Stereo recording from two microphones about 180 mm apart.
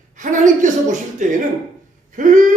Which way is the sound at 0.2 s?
45° right (ahead or behind).